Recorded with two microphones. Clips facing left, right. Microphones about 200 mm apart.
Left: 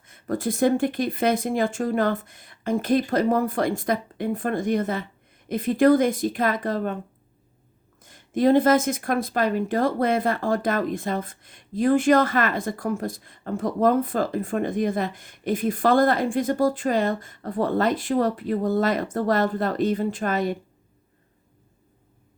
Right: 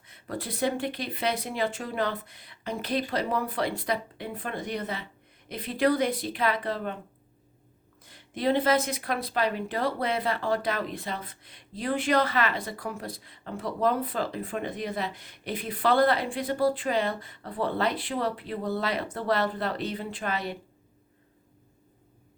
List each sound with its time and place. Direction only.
0.0 s speech: 45° left (ahead or behind)
8.0 s speech: 45° left (ahead or behind)